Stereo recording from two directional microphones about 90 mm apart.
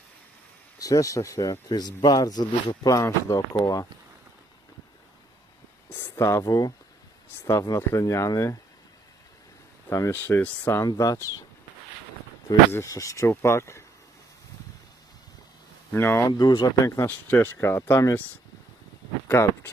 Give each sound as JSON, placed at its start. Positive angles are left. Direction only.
{"t": 0.8, "sound": "speech", "side_deg": 40}
{"t": 2.9, "sound": "speech", "side_deg": 35}
{"t": 5.9, "sound": "speech", "side_deg": 30}
{"t": 10.1, "sound": "speech", "side_deg": 20}
{"t": 10.8, "sound": "speech", "side_deg": 40}
{"t": 12.7, "sound": "speech", "side_deg": 35}
{"t": 15.9, "sound": "speech", "side_deg": 25}
{"t": 16.4, "sound": "speech", "side_deg": 50}
{"t": 16.8, "sound": "speech", "side_deg": 35}
{"t": 17.1, "sound": "speech", "side_deg": 20}
{"t": 19.3, "sound": "speech", "side_deg": 30}